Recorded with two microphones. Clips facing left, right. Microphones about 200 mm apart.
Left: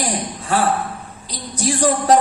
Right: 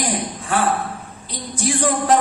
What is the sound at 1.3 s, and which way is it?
Speech, 40° left (ahead or behind).